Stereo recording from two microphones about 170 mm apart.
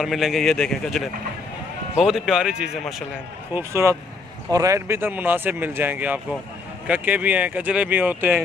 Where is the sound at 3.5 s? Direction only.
15° right (ahead or behind).